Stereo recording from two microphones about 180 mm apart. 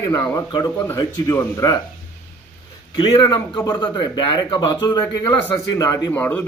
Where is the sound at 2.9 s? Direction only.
25° left (ahead or behind).